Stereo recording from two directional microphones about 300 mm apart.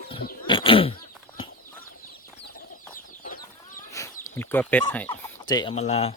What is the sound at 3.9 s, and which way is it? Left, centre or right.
Chicken, centre.